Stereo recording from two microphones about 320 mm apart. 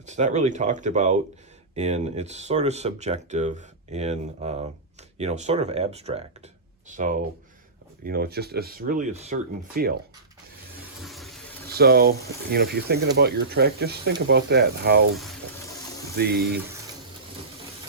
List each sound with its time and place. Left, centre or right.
0.0 s speech: right
11.0 s water: centre
11.7 s speech: right
16.1 s speech: right